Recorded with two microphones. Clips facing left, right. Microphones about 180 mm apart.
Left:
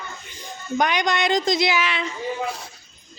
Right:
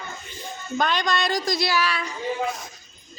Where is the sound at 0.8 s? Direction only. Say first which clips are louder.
Left 2 dB; 15° left (ahead or behind).